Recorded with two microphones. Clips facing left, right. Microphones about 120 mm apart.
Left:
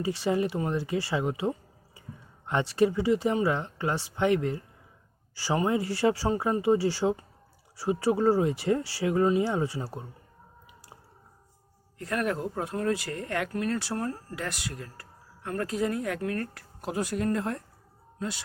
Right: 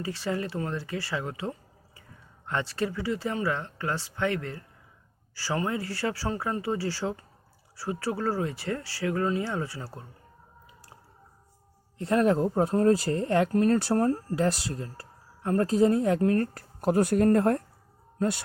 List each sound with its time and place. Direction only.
0.0 s speech: 15° left (ahead or behind)
11.9 s speech: 25° right (ahead or behind); by 18.4 s 55° right (ahead or behind)